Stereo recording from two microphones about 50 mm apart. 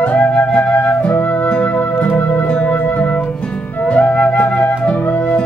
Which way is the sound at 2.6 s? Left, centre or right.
Left.